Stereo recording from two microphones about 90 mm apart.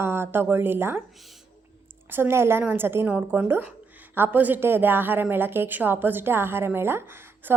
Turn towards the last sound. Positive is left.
turn(degrees=-25)  # may be behind; listen again after turning